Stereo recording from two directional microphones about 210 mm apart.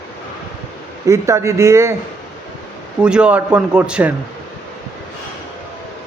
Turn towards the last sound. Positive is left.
turn(degrees=-5)  # may be behind; listen again after turning